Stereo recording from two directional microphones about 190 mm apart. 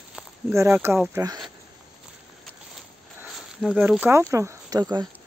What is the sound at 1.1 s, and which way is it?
Speech, 20° right (ahead or behind).